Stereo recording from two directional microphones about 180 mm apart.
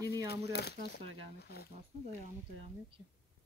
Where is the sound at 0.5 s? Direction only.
65° left (ahead or behind).